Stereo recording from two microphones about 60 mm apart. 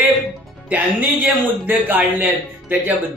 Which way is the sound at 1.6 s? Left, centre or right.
Right.